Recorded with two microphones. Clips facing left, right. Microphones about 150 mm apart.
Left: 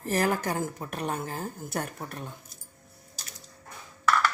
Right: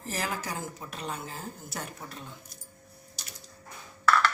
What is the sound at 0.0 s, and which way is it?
A woman's voice, 55° left (ahead or behind).